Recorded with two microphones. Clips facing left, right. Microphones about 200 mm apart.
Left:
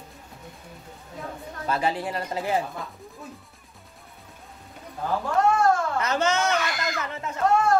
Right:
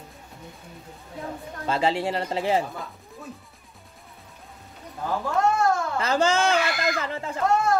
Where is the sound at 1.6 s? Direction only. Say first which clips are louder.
Right 2 dB; 25° right (ahead or behind).